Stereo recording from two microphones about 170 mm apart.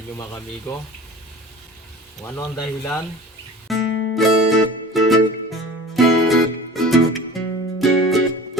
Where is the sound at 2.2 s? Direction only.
15° left (ahead or behind).